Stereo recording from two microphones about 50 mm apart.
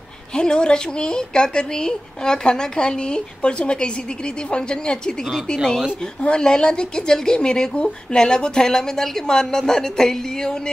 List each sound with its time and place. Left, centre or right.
0.3 s speech: centre